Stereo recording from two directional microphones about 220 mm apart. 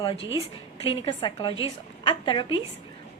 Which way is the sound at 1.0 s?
20° left (ahead or behind).